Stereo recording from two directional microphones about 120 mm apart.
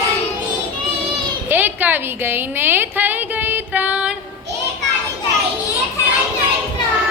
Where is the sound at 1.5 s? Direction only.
15° right (ahead or behind).